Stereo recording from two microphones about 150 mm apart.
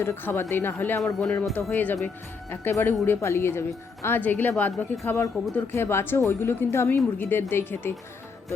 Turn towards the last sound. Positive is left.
turn(degrees=15)  # may be behind; listen again after turning